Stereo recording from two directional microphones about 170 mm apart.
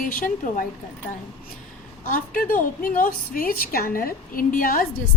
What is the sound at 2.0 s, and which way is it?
A woman's voice, 55° left (ahead or behind).